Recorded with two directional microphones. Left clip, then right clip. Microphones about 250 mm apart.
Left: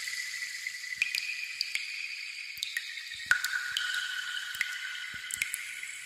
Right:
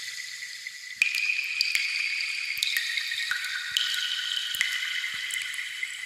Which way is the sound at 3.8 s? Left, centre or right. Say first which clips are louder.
Right 9 dB; right.